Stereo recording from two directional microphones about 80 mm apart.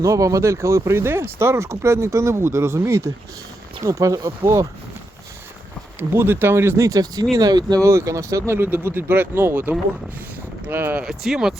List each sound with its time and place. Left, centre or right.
0.0 s speech: right
6.0 s speech: right
7.9 s speech: right
11.0 s speech: centre